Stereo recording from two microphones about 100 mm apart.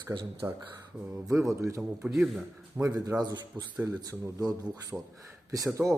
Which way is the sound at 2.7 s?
35° right (ahead or behind).